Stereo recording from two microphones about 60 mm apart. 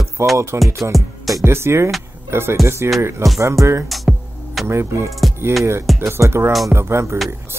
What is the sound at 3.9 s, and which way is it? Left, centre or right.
Music, centre.